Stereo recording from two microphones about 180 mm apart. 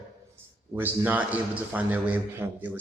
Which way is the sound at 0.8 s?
10° right (ahead or behind).